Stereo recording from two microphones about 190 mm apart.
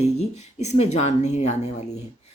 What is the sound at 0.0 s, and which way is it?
Speech, 35° left (ahead or behind).